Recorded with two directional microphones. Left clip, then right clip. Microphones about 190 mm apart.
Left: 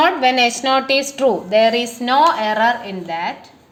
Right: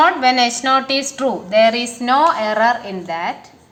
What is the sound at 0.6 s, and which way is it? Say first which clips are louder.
A woman's voice: even; 40° left (ahead or behind).